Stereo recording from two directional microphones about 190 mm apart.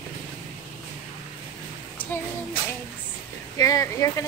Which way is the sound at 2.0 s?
10° left (ahead or behind).